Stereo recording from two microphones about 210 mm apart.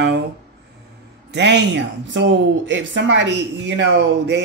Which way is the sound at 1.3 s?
55° right (ahead or behind).